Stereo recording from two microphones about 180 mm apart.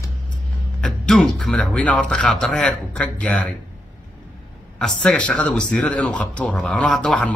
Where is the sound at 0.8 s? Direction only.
5° left (ahead or behind).